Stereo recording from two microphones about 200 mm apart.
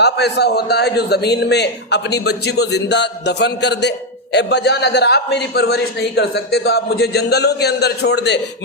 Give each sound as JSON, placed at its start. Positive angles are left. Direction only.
{"t": 0.0, "sound": "a man's voice", "side_deg": 55}